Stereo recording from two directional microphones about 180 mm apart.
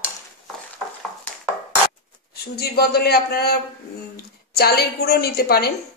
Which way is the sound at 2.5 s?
60° left (ahead or behind).